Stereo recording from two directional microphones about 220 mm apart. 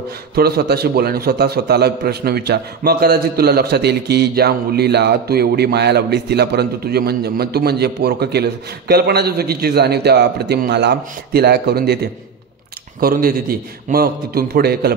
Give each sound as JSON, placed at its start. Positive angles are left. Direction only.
{"t": 0.4, "sound": "a man's voice", "side_deg": -45}